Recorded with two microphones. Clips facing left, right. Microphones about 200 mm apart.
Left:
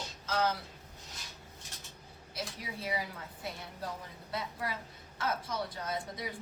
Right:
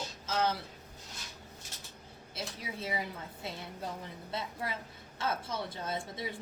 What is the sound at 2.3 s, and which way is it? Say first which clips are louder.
A woman's voice: even; 25° right (ahead or behind).